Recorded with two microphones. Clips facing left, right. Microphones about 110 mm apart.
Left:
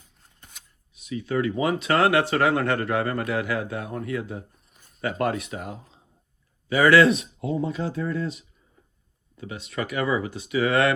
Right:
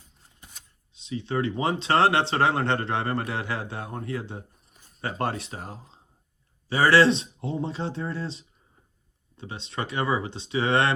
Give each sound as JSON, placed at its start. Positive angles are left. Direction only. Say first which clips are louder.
{"t": 0.9, "sound": "speech", "louder": "left 2 dB", "side_deg": -25}